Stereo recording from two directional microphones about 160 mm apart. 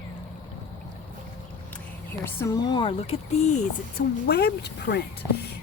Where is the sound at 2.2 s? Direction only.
15° left (ahead or behind); by 3.2 s 40° left (ahead or behind).